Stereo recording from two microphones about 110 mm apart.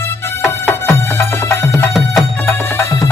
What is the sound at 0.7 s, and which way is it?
Music, 20° left (ahead or behind).